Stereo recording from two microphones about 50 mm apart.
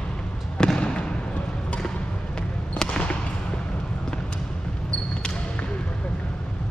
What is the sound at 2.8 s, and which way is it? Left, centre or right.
Basketball bounce, centre.